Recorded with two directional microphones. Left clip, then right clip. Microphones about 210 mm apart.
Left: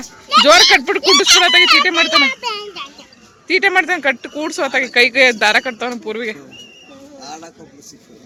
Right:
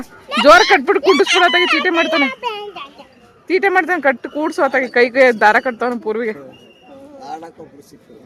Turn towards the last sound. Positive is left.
turn(degrees=10)  # may be behind; listen again after turning